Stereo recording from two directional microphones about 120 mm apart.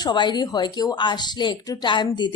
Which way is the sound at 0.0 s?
40° left (ahead or behind).